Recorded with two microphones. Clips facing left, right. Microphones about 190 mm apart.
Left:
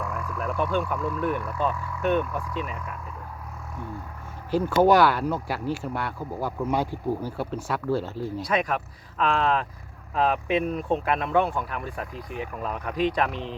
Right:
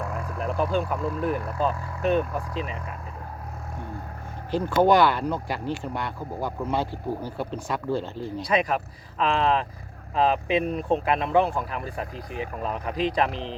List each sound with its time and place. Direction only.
0.0 s vehicle: 35° right (ahead or behind)
0.9 s speech: 30° right (ahead or behind)
4.5 s speech: 10° left (ahead or behind)
12.5 s speech: 30° right (ahead or behind)
12.8 s speech: centre (ahead or behind)
13.3 s speech: 35° right (ahead or behind)